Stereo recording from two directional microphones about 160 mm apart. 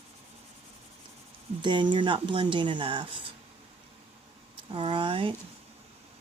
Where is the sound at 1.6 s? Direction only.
30° right (ahead or behind).